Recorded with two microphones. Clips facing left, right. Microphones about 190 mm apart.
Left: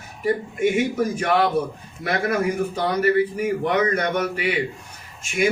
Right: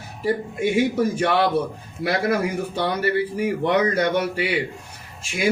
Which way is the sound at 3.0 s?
30° right (ahead or behind).